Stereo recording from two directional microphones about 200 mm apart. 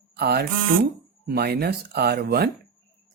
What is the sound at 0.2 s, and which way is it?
Speech, 50° right (ahead or behind).